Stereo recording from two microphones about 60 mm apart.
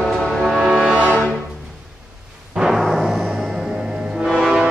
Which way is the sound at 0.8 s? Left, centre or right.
Right.